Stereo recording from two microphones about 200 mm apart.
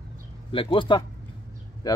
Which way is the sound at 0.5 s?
25° left (ahead or behind).